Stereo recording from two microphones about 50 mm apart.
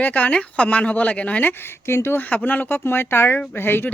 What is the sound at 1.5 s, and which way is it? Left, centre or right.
Speech, left.